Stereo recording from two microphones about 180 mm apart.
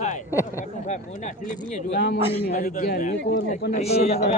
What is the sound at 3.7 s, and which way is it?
Speech, 35° left (ahead or behind).